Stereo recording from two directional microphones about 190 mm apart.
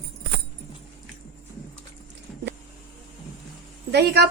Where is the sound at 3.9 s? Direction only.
60° right (ahead or behind).